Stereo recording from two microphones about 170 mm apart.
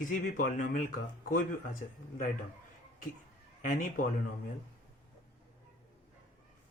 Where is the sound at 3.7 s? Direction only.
55° left (ahead or behind).